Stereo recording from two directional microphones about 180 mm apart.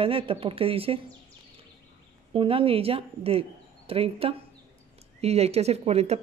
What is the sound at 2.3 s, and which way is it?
Speech, 30° right (ahead or behind).